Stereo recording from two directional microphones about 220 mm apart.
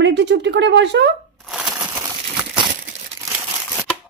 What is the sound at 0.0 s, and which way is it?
Speech, 55° right (ahead or behind).